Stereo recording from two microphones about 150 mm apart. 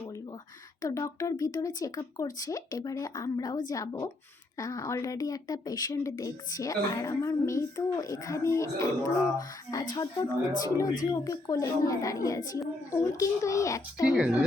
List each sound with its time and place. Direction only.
0.8 s speech: 20° left (ahead or behind)